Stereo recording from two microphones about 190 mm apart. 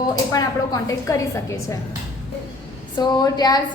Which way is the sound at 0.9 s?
15° left (ahead or behind).